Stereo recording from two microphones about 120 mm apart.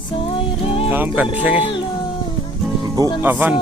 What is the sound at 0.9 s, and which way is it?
Speech, 15° right (ahead or behind).